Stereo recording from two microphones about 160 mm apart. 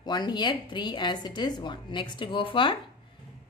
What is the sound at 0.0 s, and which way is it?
Speech, 25° left (ahead or behind).